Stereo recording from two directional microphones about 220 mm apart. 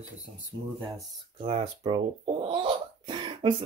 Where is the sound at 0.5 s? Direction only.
60° right (ahead or behind).